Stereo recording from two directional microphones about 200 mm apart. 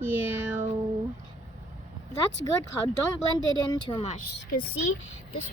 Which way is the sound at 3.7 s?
25° left (ahead or behind).